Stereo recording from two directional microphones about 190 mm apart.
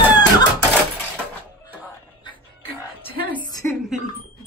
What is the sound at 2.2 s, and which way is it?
Music, 25° left (ahead or behind).